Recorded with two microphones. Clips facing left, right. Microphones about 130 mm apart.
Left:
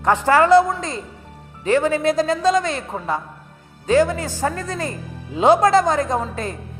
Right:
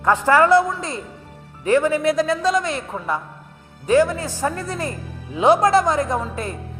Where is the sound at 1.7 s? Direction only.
30° left (ahead or behind).